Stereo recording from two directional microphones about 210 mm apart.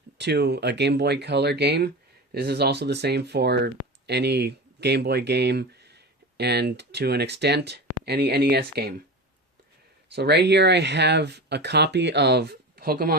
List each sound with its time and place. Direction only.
0.2 s speech: 55° right (ahead or behind)
10.2 s speech: 55° right (ahead or behind)